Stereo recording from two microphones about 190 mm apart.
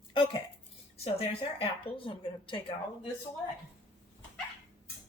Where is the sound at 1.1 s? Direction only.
30° left (ahead or behind).